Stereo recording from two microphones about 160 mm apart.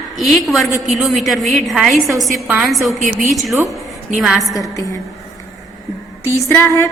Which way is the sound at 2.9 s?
50° right (ahead or behind).